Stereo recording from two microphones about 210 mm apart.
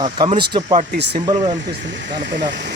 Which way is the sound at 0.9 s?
55° right (ahead or behind).